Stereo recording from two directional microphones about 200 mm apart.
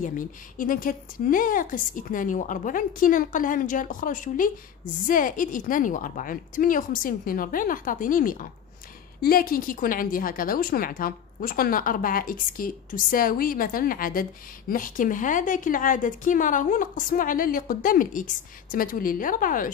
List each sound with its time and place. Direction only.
0.6 s a woman's voice: 45° left (ahead or behind)